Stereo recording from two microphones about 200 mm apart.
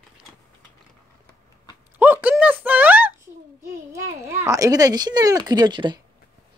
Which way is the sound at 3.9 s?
15° right (ahead or behind).